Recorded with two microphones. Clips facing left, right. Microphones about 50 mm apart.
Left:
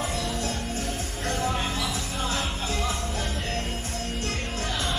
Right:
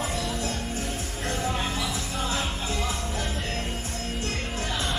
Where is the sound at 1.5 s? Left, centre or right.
Centre.